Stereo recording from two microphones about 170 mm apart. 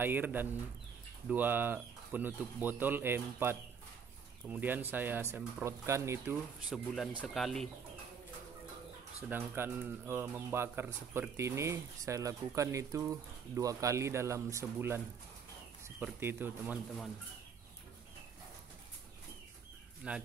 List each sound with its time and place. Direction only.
0.0 s speech: 10° right (ahead or behind)
6.7 s speech: centre (ahead or behind)
9.3 s speech: 10° right (ahead or behind)
16.0 s speech: 15° right (ahead or behind)
20.0 s speech: 5° right (ahead or behind)